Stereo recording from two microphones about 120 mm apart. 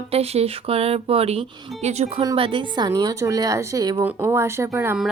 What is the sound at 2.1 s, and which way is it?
Speech, 35° right (ahead or behind).